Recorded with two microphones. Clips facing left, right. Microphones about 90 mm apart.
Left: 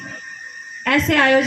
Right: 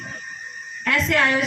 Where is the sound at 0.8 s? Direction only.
70° left (ahead or behind).